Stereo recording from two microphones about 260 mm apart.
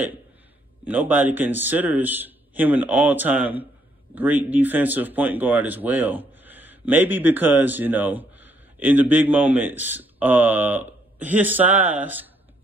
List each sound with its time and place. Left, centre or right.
0.8 s speech: centre